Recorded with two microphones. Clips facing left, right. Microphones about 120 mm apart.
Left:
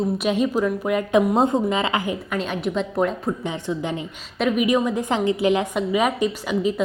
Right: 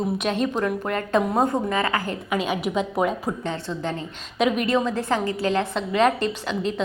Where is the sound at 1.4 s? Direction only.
20° left (ahead or behind).